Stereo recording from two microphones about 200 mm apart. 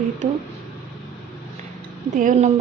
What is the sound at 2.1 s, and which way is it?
Speech, 40° right (ahead or behind).